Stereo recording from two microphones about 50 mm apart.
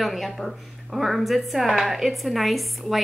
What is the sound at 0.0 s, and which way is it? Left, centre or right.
A woman's voice, centre.